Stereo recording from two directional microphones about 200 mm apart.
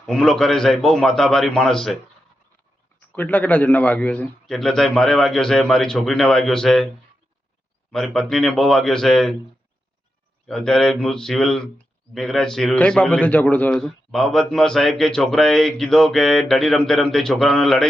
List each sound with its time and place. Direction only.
0.0 s speech: 5° left (ahead or behind)
3.1 s speech: 10° left (ahead or behind)
7.9 s speech: centre (ahead or behind)
10.5 s speech: 5° left (ahead or behind)